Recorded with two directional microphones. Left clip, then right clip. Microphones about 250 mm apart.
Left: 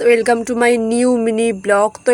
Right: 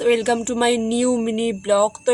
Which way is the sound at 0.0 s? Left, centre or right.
Left.